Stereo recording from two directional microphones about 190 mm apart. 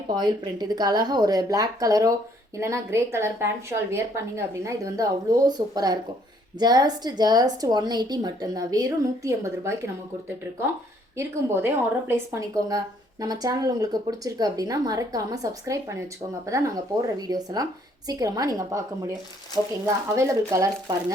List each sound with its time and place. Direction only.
0.1 s a woman's voice: 20° right (ahead or behind)
11.2 s a woman's voice: 15° right (ahead or behind)
20.1 s a woman's voice: 15° right (ahead or behind)